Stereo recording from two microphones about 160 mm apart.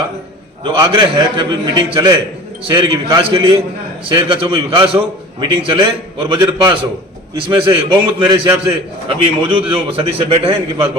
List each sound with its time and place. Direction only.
0.6 s a man's voice: 30° right (ahead or behind)